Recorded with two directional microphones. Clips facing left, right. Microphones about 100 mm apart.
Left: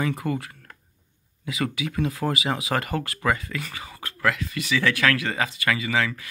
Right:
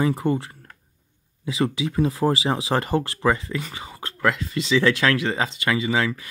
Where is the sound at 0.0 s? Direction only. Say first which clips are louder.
Right 5 dB; 30° right (ahead or behind).